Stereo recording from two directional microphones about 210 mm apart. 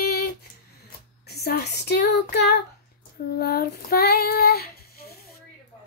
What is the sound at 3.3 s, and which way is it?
Child singing, 45° left (ahead or behind).